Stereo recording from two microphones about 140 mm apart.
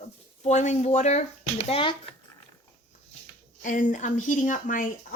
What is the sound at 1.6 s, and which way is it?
Speech, 40° left (ahead or behind).